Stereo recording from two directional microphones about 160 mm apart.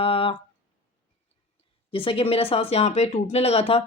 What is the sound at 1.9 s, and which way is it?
Mantra, 35° left (ahead or behind).